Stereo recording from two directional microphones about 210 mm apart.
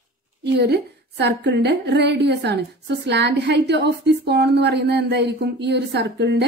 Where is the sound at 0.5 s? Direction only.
50° right (ahead or behind).